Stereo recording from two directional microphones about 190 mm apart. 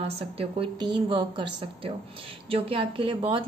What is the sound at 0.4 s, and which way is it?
A woman's voice, 25° right (ahead or behind).